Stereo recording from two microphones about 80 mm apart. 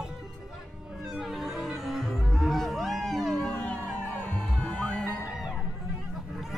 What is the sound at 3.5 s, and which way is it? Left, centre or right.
Music, centre.